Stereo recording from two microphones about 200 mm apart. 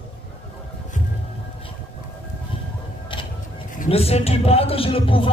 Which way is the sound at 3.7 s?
30° left (ahead or behind).